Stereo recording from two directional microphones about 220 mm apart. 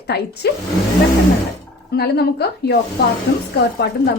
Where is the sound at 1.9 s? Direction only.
45° left (ahead or behind).